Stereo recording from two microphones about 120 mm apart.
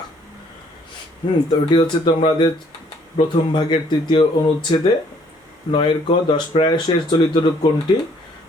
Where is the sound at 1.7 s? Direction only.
40° left (ahead or behind).